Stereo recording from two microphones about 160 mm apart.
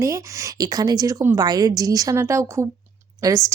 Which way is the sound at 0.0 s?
20° right (ahead or behind).